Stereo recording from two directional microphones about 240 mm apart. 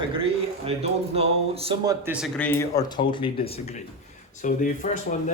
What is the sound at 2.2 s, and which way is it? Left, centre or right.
A man's voice, centre.